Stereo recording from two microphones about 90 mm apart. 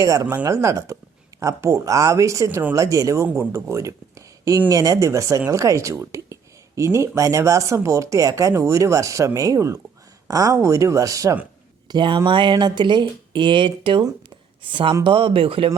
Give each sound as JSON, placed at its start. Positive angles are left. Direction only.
{"t": 0.0, "sound": "speech", "side_deg": -35}
{"t": 11.9, "sound": "speech", "side_deg": -65}
{"t": 14.3, "sound": "a sound", "side_deg": -65}
{"t": 15.0, "sound": "speech", "side_deg": -70}